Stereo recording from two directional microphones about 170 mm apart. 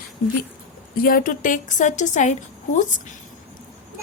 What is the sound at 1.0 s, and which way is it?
Speech, 55° left (ahead or behind).